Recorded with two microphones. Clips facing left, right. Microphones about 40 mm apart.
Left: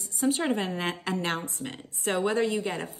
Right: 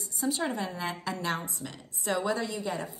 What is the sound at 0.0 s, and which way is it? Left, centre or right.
A woman's voice, left.